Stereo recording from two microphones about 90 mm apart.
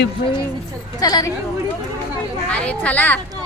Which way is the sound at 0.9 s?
45° left (ahead or behind).